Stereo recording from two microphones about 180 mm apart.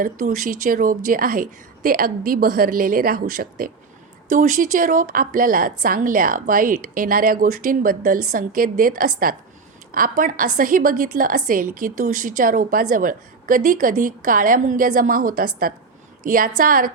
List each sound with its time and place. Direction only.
0.0 s a woman's voice: 50° right (ahead or behind)